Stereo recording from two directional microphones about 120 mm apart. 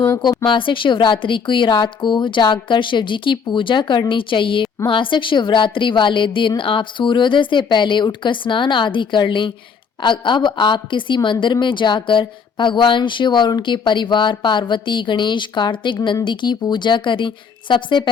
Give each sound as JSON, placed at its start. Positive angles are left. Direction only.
{"t": 0.2, "sound": "a woman's voice", "side_deg": 40}